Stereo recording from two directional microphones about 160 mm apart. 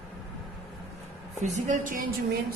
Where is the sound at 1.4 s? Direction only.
50° right (ahead or behind).